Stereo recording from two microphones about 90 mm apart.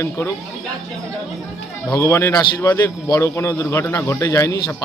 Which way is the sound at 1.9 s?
30° left (ahead or behind).